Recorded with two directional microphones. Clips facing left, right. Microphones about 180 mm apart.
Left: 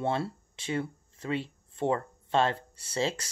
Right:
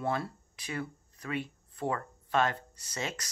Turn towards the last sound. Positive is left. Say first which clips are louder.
# left 7 dB
turn(degrees=30)  # may be behind; listen again after turning